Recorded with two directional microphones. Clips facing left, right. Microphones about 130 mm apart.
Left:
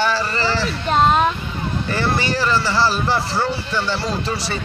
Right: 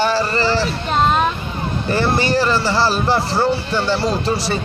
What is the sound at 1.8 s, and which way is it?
Speech, 35° right (ahead or behind).